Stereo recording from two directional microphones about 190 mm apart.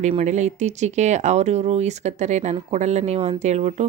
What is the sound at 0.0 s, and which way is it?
Speech, 35° right (ahead or behind).